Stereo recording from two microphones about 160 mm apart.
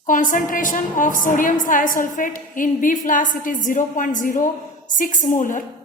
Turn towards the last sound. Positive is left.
turn(degrees=55)  # may be behind; listen again after turning